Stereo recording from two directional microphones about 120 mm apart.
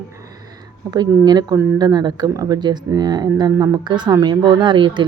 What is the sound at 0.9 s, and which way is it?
A child's voice, 35° right (ahead or behind).